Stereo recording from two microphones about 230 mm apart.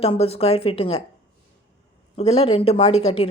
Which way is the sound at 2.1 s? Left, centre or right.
Left.